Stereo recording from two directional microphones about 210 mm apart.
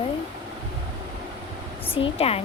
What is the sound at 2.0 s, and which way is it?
Speech, 30° left (ahead or behind).